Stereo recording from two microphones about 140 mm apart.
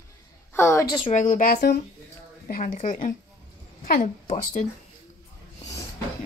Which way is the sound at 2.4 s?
90° left.